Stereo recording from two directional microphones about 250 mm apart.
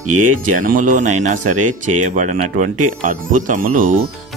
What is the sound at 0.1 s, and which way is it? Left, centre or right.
Speech, right.